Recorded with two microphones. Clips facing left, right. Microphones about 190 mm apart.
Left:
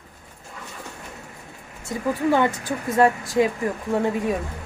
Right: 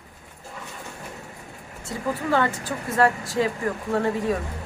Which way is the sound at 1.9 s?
20° left (ahead or behind).